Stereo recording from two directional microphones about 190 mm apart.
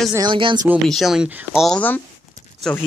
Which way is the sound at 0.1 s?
25° right (ahead or behind).